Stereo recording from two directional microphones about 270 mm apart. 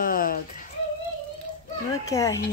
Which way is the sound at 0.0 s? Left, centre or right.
Left.